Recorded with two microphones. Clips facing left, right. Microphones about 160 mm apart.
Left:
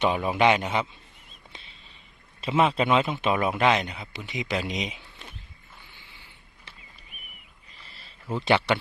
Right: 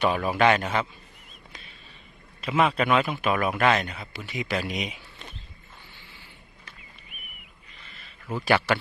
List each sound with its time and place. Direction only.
0.0 s speech: 20° left (ahead or behind)
2.4 s speech: 30° left (ahead or behind)
6.0 s vehicle: 15° left (ahead or behind)
7.1 s a sound: 35° left (ahead or behind); by 8.8 s 20° left (ahead or behind)